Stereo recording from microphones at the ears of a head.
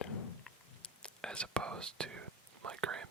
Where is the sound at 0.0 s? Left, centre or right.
Left.